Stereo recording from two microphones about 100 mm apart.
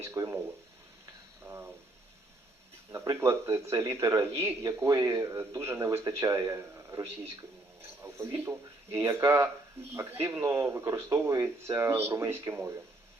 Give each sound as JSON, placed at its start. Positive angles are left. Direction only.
{"t": 0.0, "sound": "a man's voice", "side_deg": -30}
{"t": 1.5, "sound": "a man's voice", "side_deg": -20}
{"t": 2.9, "sound": "a man's voice", "side_deg": -30}
{"t": 7.8, "sound": "a sound", "side_deg": -25}
{"t": 8.4, "sound": "a man's voice", "side_deg": -25}